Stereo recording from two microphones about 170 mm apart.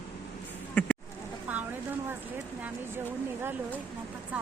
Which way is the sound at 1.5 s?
10° right (ahead or behind).